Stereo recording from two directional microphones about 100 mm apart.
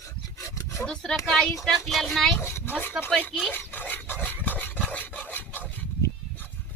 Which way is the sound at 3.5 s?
20° left (ahead or behind).